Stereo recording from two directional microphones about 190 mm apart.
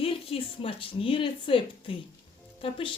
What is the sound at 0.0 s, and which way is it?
Speech, 30° left (ahead or behind).